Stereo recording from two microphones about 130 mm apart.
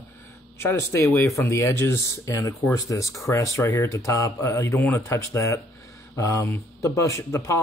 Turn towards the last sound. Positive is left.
turn(degrees=20)  # may be behind; listen again after turning